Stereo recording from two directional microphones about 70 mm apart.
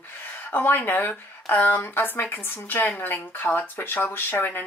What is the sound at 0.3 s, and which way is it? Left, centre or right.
Speech, left.